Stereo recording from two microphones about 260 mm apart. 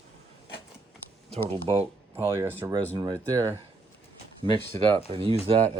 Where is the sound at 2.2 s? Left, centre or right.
Centre.